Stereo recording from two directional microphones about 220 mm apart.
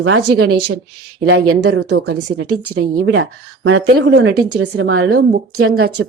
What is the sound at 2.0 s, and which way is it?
Speech, 85° right.